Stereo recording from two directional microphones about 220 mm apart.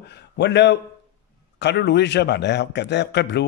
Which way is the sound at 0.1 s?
50° left (ahead or behind).